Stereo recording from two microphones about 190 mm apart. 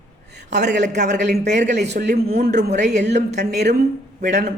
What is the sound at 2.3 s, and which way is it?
Speech, 60° right (ahead or behind).